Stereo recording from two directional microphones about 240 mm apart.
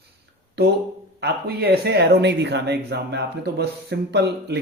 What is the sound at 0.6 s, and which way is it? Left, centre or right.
Speech, right.